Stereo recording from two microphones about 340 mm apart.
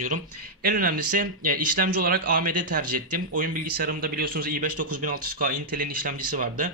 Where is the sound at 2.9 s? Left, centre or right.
Right.